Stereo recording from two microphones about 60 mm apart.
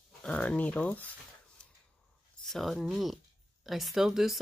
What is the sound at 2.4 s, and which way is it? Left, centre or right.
Speech, centre.